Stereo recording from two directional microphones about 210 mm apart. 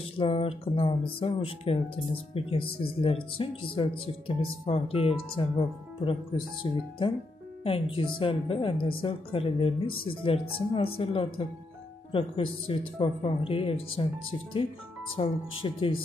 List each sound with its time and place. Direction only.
0.2 s speech: 25° left (ahead or behind)
15.1 s speech: 25° left (ahead or behind)